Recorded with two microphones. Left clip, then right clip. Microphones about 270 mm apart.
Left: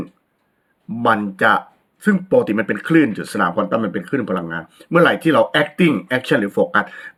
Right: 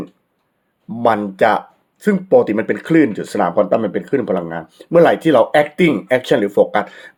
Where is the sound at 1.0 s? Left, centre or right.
Right.